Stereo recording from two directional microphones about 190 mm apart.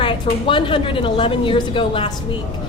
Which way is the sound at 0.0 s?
25° left (ahead or behind).